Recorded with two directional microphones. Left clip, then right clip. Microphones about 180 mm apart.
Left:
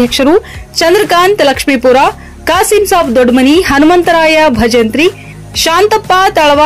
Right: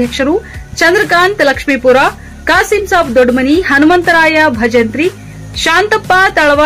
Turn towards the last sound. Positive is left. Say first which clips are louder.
# left 1 dB
turn(degrees=35)  # may be behind; listen again after turning